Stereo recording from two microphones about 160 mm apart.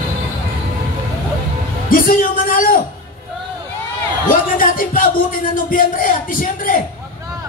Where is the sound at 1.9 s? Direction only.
60° left (ahead or behind).